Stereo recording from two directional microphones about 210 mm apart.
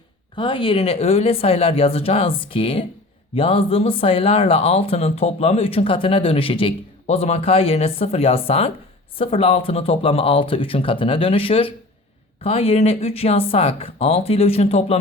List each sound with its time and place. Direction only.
0.3 s speech: 25° left (ahead or behind)